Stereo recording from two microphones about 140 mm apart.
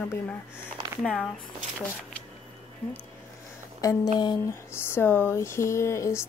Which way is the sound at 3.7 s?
25° left (ahead or behind).